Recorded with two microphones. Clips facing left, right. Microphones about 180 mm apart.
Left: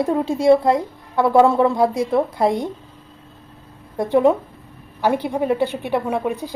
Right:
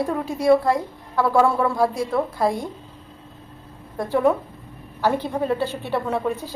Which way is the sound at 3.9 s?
20° left (ahead or behind).